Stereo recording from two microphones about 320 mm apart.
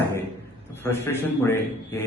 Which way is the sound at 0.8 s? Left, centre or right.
Centre.